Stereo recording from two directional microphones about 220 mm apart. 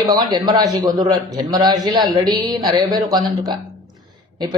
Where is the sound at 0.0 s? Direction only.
15° right (ahead or behind).